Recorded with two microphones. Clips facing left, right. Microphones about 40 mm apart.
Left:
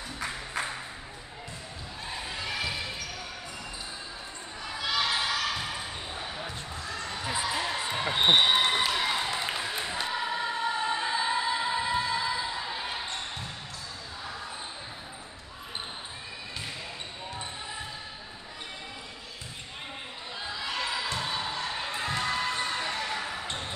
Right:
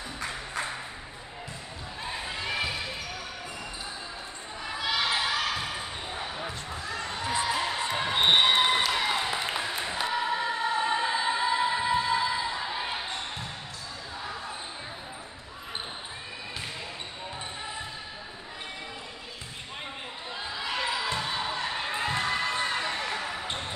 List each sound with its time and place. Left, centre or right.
0.2 s music: centre
2.4 s basketball bounce: centre
4.6 s basketball bounce: centre
7.5 s a sound: centre
8.1 s basketball bounce: centre
8.9 s choir: centre
20.6 s basketball bounce: centre